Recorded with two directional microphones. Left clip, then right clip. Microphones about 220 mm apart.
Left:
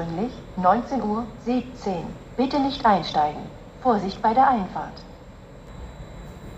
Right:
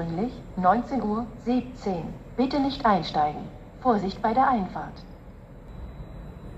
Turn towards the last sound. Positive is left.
turn(degrees=-20)  # may be behind; listen again after turning